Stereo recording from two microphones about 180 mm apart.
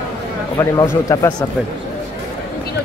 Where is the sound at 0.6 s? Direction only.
15° left (ahead or behind).